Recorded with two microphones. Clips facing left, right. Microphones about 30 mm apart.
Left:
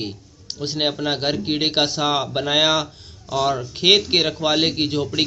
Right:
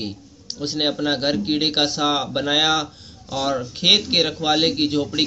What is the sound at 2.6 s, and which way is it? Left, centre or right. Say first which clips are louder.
Speech: left 1 dB; left.